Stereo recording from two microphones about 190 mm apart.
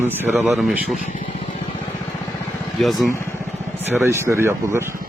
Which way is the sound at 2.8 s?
Centre (ahead or behind).